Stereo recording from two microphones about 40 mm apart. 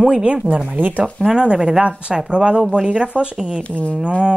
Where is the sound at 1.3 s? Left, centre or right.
Right.